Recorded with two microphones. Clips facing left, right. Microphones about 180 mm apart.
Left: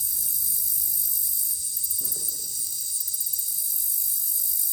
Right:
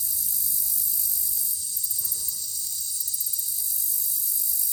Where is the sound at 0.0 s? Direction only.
50° left (ahead or behind).